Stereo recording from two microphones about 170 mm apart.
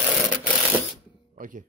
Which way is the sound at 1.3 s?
50° right (ahead or behind).